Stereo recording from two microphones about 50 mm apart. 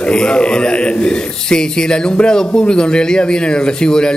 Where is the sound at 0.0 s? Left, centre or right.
Centre.